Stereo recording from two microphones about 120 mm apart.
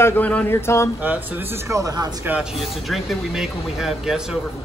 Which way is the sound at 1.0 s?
15° right (ahead or behind).